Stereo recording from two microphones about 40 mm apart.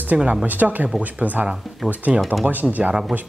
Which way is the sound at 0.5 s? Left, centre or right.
Right.